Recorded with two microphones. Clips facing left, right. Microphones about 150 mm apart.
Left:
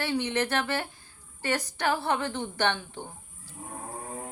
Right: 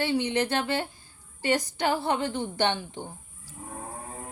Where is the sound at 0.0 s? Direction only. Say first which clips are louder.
Right 2 dB; 15° right (ahead or behind).